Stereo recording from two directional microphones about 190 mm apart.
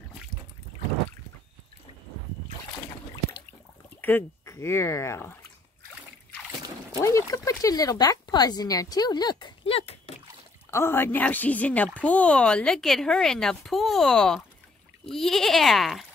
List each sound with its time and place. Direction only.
4.0 s speech: 10° left (ahead or behind)
7.0 s speech: 15° left (ahead or behind); by 10.1 s 30° left (ahead or behind)
10.7 s a woman's voice: 15° left (ahead or behind)